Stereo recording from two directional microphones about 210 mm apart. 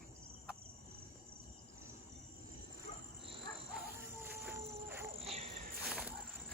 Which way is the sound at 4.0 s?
10° right (ahead or behind).